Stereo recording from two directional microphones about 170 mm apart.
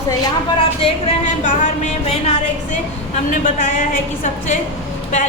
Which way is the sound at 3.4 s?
50° left (ahead or behind).